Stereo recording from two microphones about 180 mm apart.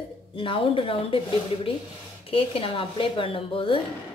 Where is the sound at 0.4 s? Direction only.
30° left (ahead or behind).